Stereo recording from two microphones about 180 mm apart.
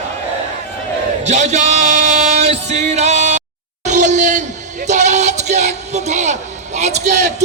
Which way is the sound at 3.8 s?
40° right (ahead or behind).